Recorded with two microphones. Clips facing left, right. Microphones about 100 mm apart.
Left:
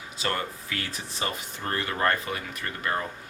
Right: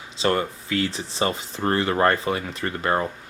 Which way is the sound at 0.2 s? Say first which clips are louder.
Right 8 dB; 25° right (ahead or behind).